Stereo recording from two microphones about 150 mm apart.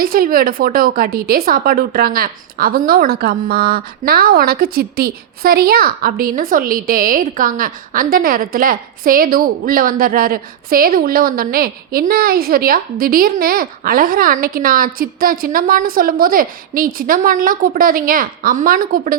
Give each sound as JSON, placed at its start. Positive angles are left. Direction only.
{"t": 0.0, "sound": "a woman's voice", "side_deg": -80}